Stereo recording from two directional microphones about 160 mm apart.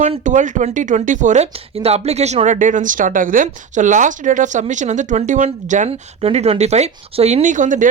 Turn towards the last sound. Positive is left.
turn(degrees=-55)  # may be behind; listen again after turning